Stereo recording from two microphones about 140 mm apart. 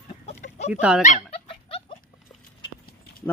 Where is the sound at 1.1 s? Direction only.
45° left (ahead or behind).